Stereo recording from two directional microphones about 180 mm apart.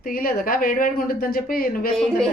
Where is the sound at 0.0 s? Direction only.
55° left (ahead or behind).